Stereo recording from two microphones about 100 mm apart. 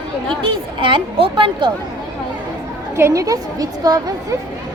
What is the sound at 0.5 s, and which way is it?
Speech, 55° right (ahead or behind).